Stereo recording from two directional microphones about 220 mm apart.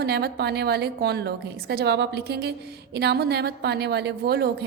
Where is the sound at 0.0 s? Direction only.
50° right (ahead or behind).